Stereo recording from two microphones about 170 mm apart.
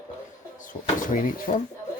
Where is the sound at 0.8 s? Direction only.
50° left (ahead or behind).